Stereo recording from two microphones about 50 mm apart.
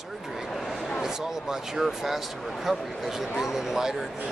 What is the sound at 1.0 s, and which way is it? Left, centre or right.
Speech, centre.